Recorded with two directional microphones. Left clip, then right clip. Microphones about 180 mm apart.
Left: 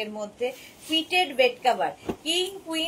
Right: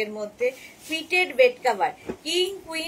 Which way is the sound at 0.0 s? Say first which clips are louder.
Right 4 dB; 15° right (ahead or behind).